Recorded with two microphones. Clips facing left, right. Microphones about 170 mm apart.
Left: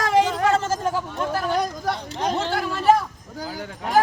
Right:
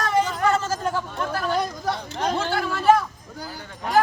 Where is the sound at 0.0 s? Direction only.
90° left.